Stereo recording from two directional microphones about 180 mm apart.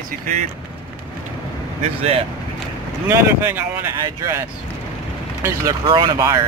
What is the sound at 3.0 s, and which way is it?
Speech, 10° right (ahead or behind).